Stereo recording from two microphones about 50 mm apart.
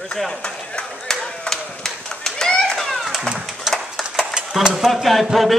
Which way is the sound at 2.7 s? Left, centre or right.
Centre.